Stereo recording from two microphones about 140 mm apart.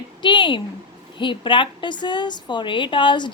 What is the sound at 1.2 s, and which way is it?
A woman's voice, 35° left (ahead or behind).